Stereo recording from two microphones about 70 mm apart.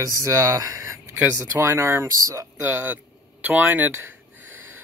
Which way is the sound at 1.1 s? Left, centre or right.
Right.